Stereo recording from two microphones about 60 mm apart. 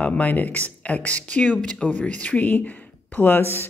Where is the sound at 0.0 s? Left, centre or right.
Left.